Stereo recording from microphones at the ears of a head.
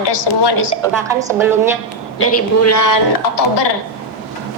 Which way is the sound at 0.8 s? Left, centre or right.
Right.